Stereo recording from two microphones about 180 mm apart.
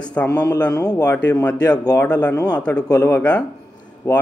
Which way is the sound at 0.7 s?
20° left (ahead or behind).